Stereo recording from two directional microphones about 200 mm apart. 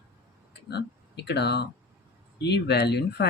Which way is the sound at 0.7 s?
55° left (ahead or behind).